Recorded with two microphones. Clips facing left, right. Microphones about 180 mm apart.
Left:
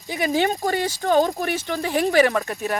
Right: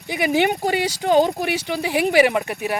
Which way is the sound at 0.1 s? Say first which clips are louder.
Right 2 dB; 15° right (ahead or behind).